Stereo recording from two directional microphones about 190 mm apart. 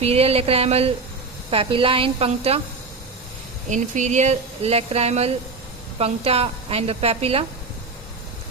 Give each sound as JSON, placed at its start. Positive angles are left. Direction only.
{"t": 0.0, "sound": "a woman's voice", "side_deg": -30}
{"t": 3.7, "sound": "speech", "side_deg": -40}